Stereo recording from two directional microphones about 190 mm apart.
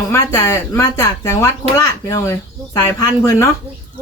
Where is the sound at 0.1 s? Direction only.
15° left (ahead or behind).